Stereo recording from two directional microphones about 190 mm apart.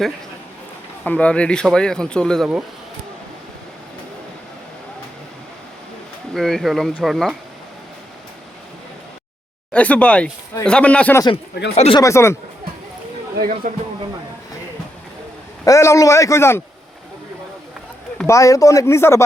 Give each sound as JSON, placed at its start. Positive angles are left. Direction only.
{"t": 1.0, "sound": "speech", "side_deg": 5}
{"t": 6.3, "sound": "speech", "side_deg": 0}
{"t": 9.7, "sound": "speech", "side_deg": 5}
{"t": 11.7, "sound": "speech", "side_deg": 35}
{"t": 11.9, "sound": "speech", "side_deg": 15}
{"t": 13.6, "sound": "speech", "side_deg": -45}
{"t": 15.6, "sound": "speech", "side_deg": 15}
{"t": 18.3, "sound": "speech", "side_deg": 15}